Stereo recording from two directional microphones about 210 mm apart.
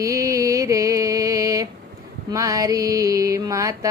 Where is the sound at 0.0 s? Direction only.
15° right (ahead or behind).